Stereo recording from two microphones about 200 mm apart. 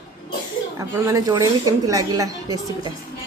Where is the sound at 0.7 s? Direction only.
15° right (ahead or behind).